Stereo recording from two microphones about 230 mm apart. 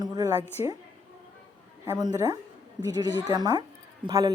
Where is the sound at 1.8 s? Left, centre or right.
Centre.